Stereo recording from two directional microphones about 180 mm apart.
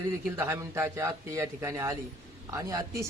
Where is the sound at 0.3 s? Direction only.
15° right (ahead or behind).